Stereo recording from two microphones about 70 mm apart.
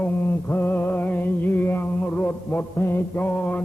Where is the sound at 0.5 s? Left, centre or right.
Left.